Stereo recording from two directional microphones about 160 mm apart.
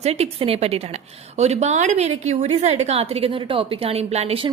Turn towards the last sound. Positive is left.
turn(degrees=-40)  # may be behind; listen again after turning